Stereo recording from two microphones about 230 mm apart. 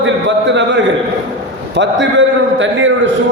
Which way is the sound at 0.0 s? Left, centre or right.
Right.